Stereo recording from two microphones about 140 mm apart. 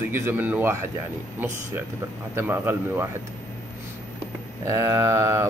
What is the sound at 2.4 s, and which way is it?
Speech, 15° right (ahead or behind).